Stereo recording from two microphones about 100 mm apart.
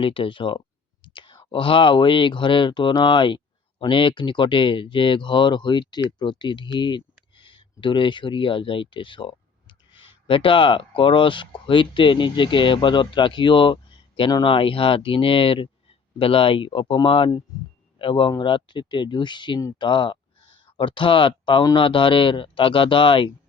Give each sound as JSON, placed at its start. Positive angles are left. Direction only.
{"t": 0.0, "sound": "speech", "side_deg": 60}
{"t": 1.0, "sound": "whispering", "side_deg": 55}
{"t": 1.5, "sound": "speech", "side_deg": 60}